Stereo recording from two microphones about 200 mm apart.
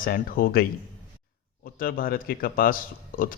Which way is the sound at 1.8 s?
45° left (ahead or behind).